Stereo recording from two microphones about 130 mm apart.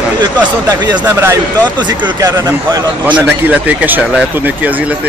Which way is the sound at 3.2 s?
10° right (ahead or behind).